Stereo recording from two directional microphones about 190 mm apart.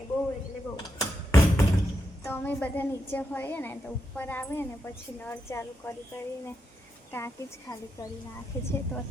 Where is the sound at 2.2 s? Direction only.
10° left (ahead or behind).